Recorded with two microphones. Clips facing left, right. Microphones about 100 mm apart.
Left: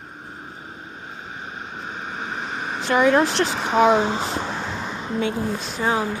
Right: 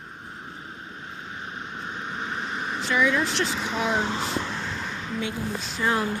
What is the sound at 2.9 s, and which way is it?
Speech, 55° left (ahead or behind).